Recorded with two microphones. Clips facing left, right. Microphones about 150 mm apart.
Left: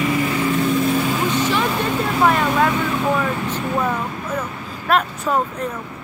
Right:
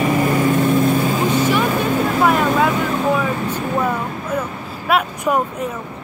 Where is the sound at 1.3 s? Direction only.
10° right (ahead or behind).